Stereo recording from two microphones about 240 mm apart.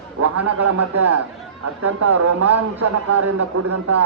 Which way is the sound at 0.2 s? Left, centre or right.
Right.